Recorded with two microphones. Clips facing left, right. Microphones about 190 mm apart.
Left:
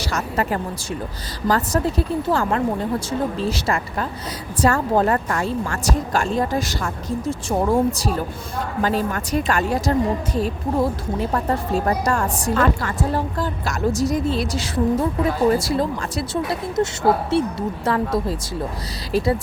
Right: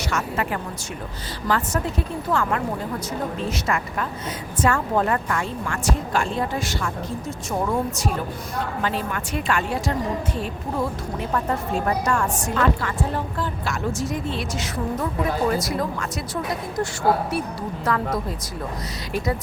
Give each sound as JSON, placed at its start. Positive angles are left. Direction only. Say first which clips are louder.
{"t": 0.0, "sound": "a woman's voice", "louder": "left 2 dB", "side_deg": 35}
{"t": 11.2, "sound": "a woman's voice", "louder": "left 2 dB", "side_deg": 35}